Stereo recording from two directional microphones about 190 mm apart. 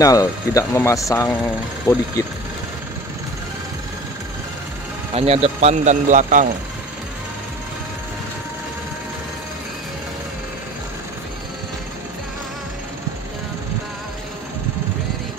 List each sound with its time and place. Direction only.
0.0 s speech: 20° left (ahead or behind)
5.1 s speech: 30° right (ahead or behind)